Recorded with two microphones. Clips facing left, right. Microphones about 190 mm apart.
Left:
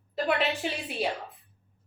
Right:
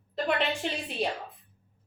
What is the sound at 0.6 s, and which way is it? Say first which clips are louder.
Speech: even; 5° left (ahead or behind).